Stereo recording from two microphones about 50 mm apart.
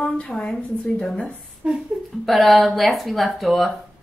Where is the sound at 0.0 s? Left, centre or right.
Centre.